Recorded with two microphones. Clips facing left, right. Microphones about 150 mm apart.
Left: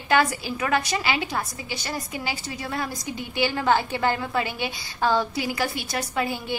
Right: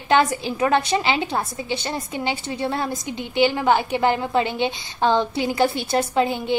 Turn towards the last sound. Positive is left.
turn(degrees=-20)  # may be behind; listen again after turning